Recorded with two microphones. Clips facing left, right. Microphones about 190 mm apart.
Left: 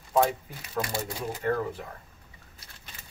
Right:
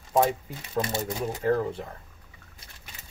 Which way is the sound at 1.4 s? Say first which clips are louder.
Right 3 dB; 25° right (ahead or behind).